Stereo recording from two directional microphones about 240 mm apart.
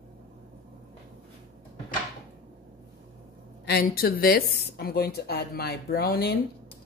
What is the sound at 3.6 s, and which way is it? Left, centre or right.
A woman's voice, left.